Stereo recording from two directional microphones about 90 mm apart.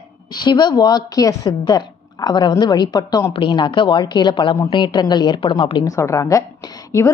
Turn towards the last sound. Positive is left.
turn(degrees=40)  # may be behind; listen again after turning